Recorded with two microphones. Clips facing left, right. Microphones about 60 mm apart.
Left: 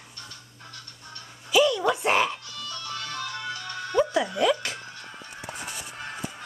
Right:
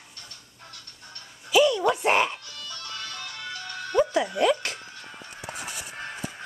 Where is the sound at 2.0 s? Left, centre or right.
Right.